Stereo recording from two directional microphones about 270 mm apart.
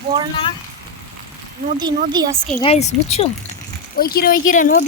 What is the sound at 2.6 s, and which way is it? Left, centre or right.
Speech, left.